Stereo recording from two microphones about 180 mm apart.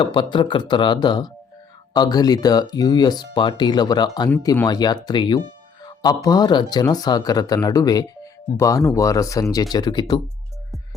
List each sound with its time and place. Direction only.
0.0 s speech: 25° left (ahead or behind)
5.8 s music: 20° left (ahead or behind)
6.2 s speech: 20° left (ahead or behind)